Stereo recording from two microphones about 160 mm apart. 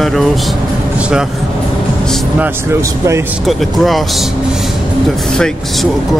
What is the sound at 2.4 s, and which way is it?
Speech, 15° right (ahead or behind).